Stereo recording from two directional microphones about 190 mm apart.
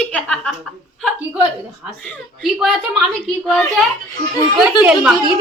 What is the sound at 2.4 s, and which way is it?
Speech, centre (ahead or behind).